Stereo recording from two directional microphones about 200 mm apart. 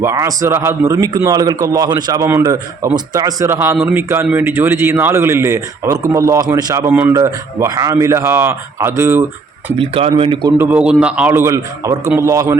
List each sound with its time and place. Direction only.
0.0 s a man's voice: 15° right (ahead or behind)
9.7 s speech: 25° right (ahead or behind)
10.6 s a man's voice: 10° right (ahead or behind)